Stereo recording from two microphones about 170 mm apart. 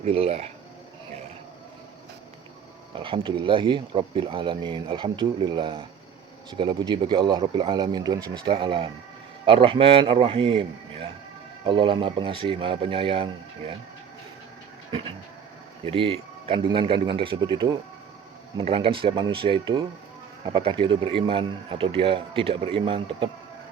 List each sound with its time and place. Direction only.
0.0 s a man's voice: 35° right (ahead or behind)
2.9 s a man's voice: 30° right (ahead or behind)
15.8 s a man's voice: 35° right (ahead or behind)